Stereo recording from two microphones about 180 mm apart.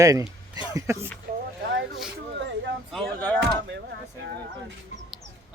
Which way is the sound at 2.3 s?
75° right (ahead or behind).